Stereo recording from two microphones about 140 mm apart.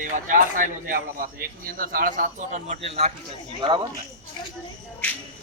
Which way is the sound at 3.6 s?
35° right (ahead or behind).